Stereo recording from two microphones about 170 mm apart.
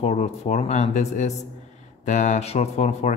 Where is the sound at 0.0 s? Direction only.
40° left (ahead or behind).